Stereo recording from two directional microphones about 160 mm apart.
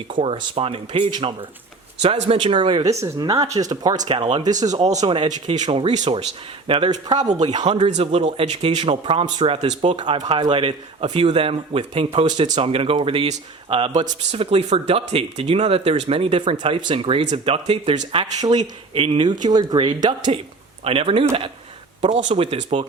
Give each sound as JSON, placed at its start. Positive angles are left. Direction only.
{"t": 0.1, "sound": "speech", "side_deg": -35}
{"t": 7.2, "sound": "speech", "side_deg": -45}
{"t": 9.8, "sound": "speech", "side_deg": -30}
{"t": 13.9, "sound": "speech", "side_deg": -50}